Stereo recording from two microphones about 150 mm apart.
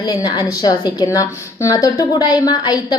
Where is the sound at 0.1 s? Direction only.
25° left (ahead or behind).